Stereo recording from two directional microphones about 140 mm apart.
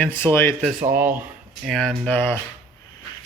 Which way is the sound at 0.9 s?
15° right (ahead or behind).